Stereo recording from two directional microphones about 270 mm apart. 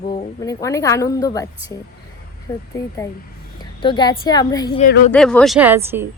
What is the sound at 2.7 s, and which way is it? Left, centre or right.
Speech, centre.